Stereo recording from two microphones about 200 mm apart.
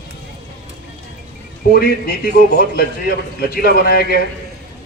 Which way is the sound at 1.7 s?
45° left (ahead or behind).